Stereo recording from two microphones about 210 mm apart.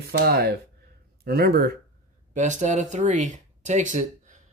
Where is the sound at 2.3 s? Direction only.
35° right (ahead or behind).